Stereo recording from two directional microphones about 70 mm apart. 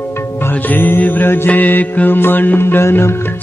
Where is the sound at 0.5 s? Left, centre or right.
Left.